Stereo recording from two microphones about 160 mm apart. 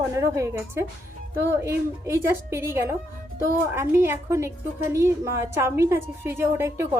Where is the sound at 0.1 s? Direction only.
20° right (ahead or behind).